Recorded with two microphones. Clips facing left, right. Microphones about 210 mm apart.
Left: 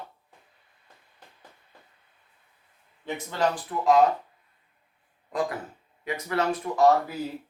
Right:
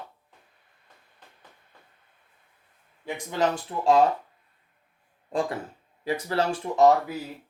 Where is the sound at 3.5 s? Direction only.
30° right (ahead or behind).